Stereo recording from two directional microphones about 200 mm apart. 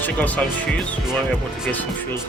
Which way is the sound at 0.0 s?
5° left (ahead or behind).